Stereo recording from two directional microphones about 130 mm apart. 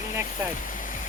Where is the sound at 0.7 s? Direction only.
90° left.